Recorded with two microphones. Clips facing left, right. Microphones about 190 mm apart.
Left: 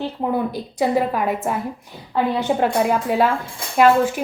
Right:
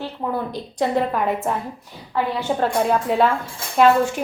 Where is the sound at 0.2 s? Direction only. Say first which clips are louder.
Left 3 dB; 20° left (ahead or behind).